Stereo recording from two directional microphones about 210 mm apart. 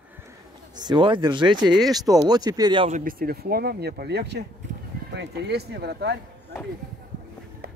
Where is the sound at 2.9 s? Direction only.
40° right (ahead or behind).